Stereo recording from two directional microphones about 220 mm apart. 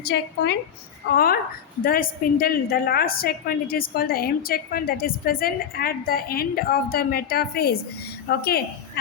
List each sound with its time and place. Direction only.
0.0 s a woman's voice: 50° left (ahead or behind)